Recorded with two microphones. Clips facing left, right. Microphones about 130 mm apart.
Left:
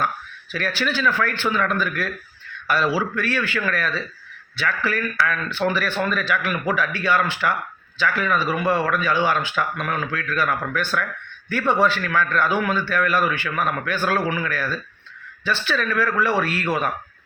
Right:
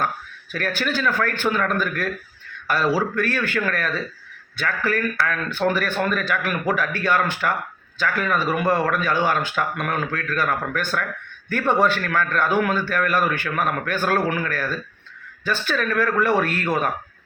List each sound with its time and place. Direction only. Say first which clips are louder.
0.5 s a man's voice: even; 45° right (ahead or behind)